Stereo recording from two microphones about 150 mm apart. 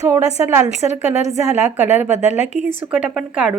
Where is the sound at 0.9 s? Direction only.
50° left (ahead or behind).